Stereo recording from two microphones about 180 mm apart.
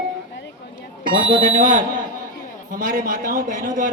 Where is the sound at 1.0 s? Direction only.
30° right (ahead or behind).